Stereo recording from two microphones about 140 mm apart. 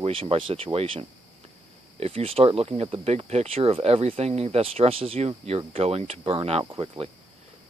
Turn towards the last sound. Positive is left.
turn(degrees=-45)  # may be behind; listen again after turning